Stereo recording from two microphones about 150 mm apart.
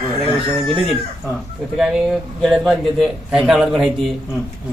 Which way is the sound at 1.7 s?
5° right (ahead or behind).